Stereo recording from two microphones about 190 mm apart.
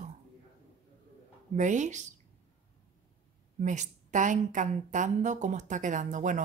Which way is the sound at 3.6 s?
40° right (ahead or behind).